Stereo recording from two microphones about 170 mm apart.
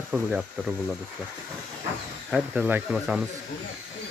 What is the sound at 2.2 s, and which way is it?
Speech, 5° right (ahead or behind).